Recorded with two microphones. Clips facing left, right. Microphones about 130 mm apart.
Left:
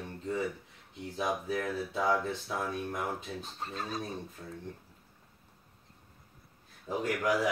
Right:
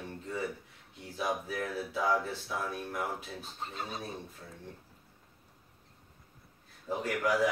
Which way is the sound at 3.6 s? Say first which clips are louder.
Left 2 dB; 15° right (ahead or behind).